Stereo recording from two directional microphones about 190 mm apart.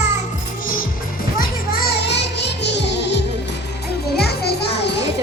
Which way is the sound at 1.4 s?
55° left (ahead or behind).